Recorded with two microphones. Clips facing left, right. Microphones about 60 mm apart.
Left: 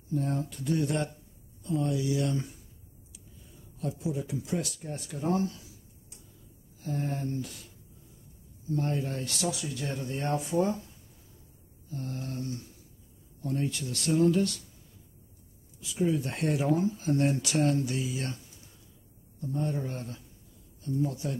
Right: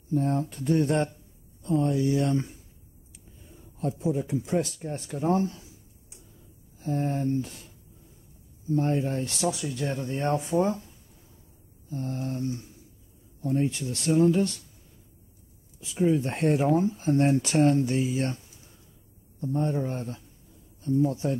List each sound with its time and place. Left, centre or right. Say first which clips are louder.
0.1 s speech: right 5 dB; right
3.5 s speech: right 4 dB; right
6.8 s speech: right 5 dB; right
11.9 s speech: right 5 dB; right
15.8 s speech: right 4 dB; right
19.4 s speech: right 5 dB; right